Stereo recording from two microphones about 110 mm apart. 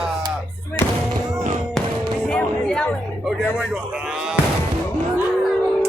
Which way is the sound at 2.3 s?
5° left (ahead or behind).